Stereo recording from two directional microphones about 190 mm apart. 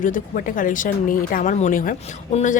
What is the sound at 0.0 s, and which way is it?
Speech, 45° left (ahead or behind).